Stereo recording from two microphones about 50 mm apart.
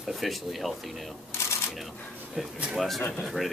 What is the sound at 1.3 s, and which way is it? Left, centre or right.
Shuffling cards, left.